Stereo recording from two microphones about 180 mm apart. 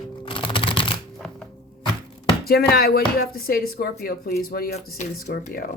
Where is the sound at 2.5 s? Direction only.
60° left (ahead or behind).